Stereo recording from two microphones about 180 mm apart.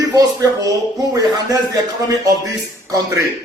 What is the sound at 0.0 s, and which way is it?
Speech, 20° right (ahead or behind).